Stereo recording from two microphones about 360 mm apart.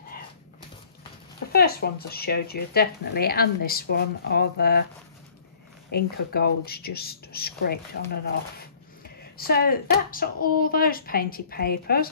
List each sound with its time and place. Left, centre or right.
1.5 s speech: left
5.9 s speech: left